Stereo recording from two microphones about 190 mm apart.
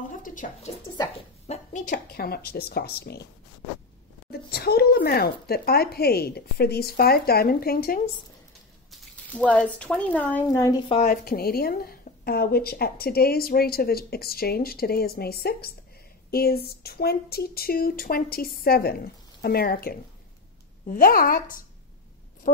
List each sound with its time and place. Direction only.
0.2 s drip: 45° left (ahead or behind)
1.5 s speech: 40° left (ahead or behind); by 3.2 s 55° left (ahead or behind)
4.3 s speech: 55° left (ahead or behind)
8.9 s speech: 5° left (ahead or behind)
11.1 s a woman's voice: 55° left (ahead or behind)